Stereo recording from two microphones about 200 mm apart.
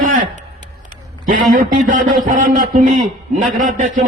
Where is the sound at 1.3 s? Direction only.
40° right (ahead or behind).